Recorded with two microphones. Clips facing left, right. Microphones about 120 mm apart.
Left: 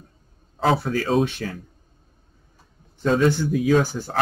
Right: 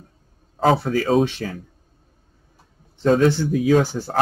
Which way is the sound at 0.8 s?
45° right (ahead or behind).